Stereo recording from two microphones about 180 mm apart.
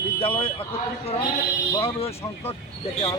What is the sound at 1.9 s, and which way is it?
Speech, 35° left (ahead or behind).